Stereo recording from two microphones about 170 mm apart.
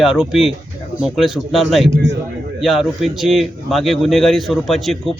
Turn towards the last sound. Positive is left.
turn(degrees=0)  # may be behind; listen again after turning